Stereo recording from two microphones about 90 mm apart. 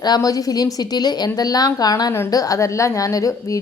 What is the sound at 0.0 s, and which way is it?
A woman's voice, 45° left (ahead or behind).